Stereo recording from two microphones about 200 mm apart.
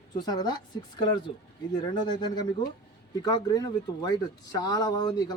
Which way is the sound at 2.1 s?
20° left (ahead or behind).